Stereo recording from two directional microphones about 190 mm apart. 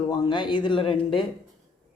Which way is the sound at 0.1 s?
25° left (ahead or behind).